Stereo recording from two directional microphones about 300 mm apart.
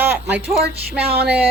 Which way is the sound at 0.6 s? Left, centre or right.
Right.